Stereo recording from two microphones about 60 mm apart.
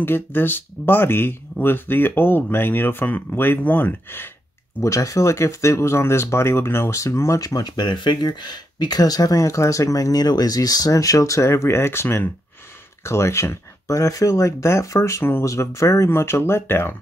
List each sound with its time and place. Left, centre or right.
0.0 s speech: left
4.8 s speech: left
6.9 s speech: left
7.3 s speech: left
8.9 s speech: left
13.8 s speech: left
16.1 s speech: left